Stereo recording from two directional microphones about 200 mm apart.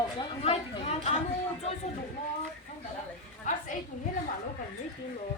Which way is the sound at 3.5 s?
35° left (ahead or behind).